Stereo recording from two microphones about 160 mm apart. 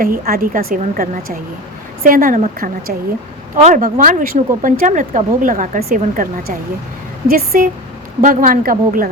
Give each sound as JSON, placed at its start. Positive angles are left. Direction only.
{"t": 0.0, "sound": "a woman's voice", "side_deg": -65}